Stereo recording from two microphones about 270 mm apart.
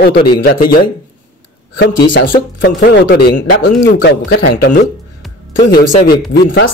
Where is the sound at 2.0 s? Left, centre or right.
Left.